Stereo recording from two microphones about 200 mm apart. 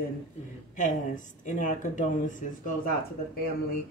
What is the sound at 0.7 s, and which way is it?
Speech, 40° left (ahead or behind).